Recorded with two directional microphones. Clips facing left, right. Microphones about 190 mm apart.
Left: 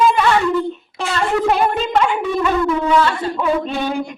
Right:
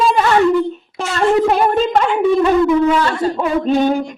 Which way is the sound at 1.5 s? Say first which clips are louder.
Right 3 dB; 40° right (ahead or behind).